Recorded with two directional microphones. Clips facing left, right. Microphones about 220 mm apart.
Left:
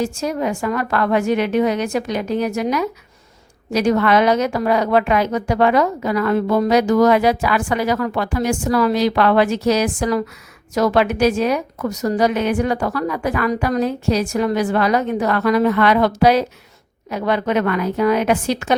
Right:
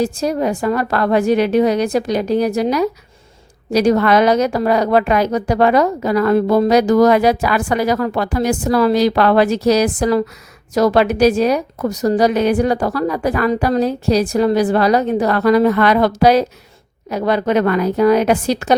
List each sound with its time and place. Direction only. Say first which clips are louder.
0.0 s a woman's voice: right 3 dB; 35° right (ahead or behind)